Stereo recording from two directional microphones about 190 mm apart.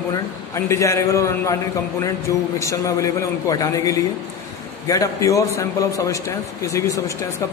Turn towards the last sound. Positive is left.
turn(degrees=15)  # may be behind; listen again after turning